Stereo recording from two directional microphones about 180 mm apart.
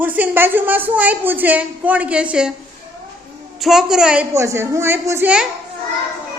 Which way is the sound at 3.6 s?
Centre (ahead or behind).